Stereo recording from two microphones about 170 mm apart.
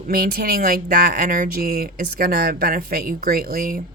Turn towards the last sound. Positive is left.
turn(degrees=-55)  # may be behind; listen again after turning